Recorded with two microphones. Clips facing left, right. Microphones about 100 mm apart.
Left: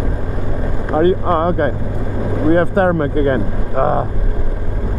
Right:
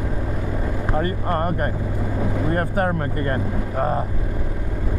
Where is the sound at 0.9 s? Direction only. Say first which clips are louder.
Left 11 dB; 40° left (ahead or behind).